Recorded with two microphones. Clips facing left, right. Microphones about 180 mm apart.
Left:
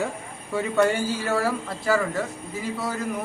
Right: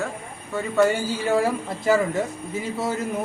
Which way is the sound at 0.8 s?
15° right (ahead or behind).